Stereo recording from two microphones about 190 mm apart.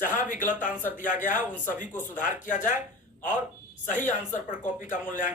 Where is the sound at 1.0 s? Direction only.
45° left (ahead or behind).